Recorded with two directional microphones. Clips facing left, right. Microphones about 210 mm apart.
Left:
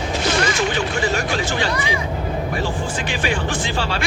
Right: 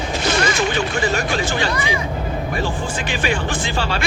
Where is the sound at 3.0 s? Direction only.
55° right (ahead or behind).